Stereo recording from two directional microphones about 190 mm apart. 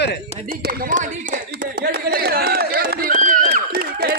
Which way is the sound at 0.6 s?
50° right (ahead or behind).